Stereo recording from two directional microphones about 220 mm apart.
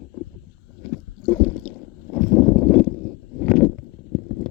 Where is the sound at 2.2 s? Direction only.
10° left (ahead or behind).